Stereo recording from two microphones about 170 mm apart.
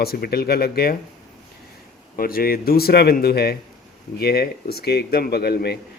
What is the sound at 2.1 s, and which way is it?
Speech, 60° left (ahead or behind).